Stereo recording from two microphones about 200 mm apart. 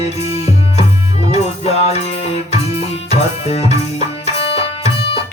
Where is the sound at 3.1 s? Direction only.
30° left (ahead or behind).